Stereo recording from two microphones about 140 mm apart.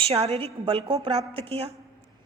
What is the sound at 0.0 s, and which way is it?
A woman's voice, 45° right (ahead or behind).